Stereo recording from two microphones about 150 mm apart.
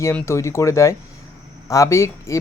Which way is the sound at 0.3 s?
20° left (ahead or behind).